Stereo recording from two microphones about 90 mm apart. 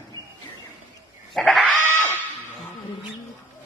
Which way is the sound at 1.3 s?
Centre (ahead or behind).